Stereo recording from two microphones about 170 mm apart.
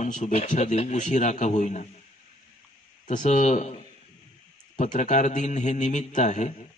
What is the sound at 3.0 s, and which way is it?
A man's voice, 45° left (ahead or behind).